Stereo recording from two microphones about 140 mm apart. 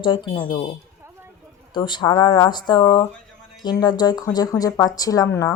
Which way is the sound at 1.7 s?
35° left (ahead or behind).